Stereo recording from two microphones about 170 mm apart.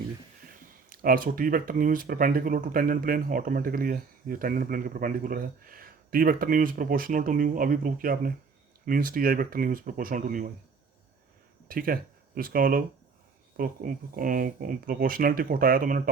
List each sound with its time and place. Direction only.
0.9 s speech: 55° right (ahead or behind)
11.7 s speech: 60° right (ahead or behind)